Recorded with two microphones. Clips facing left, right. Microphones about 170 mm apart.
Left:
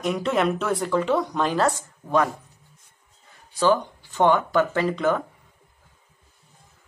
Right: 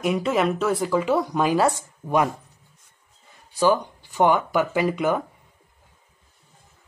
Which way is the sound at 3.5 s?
15° right (ahead or behind).